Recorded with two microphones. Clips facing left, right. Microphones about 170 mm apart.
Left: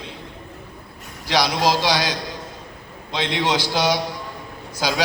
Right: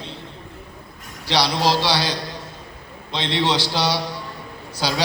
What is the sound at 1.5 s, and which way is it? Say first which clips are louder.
Speech: even; 15° left (ahead or behind).